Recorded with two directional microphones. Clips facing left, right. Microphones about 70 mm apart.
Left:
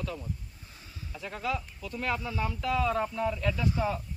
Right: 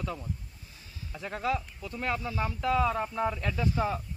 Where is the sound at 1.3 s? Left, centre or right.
Right.